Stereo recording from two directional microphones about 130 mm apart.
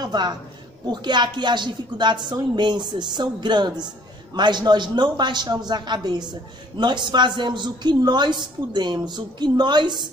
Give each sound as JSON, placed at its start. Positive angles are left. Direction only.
{"t": 0.0, "sound": "a woman's voice", "side_deg": -35}